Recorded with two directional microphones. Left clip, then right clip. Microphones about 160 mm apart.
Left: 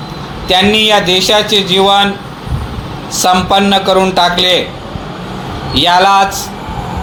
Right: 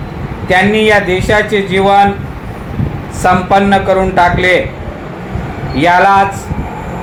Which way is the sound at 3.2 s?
40° left (ahead or behind).